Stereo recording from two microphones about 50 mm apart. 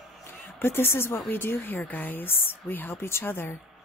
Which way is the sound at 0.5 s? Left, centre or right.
Left.